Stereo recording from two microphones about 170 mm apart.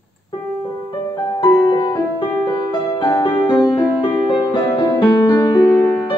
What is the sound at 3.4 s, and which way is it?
Music, 10° left (ahead or behind).